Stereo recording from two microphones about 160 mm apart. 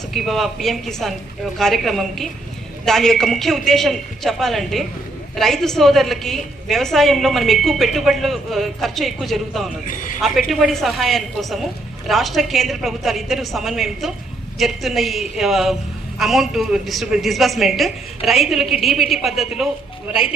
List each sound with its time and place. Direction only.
0.1 s a woman's voice: centre (ahead or behind)
9.8 s a man's voice: 55° left (ahead or behind)
10.2 s a woman's voice: centre (ahead or behind)